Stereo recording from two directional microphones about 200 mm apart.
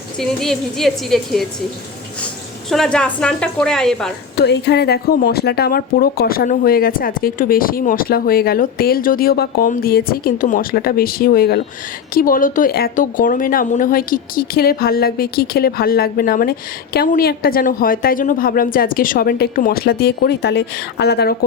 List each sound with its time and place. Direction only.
0.2 s a woman's voice: centre (ahead or behind)
4.4 s speech: 55° left (ahead or behind)